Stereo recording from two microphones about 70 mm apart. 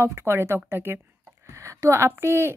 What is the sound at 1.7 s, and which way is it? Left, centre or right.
Speech, right.